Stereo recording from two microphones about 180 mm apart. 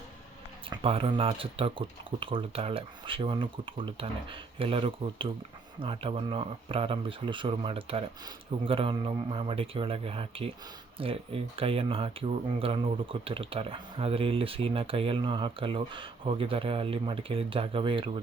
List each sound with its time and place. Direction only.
0.7 s speech: 30° right (ahead or behind)